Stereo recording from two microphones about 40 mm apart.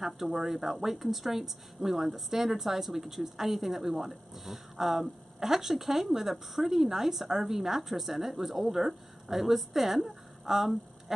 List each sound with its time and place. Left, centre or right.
0.0 s a woman's voice: centre